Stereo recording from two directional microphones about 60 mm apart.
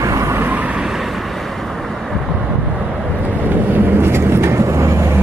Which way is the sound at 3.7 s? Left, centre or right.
Right.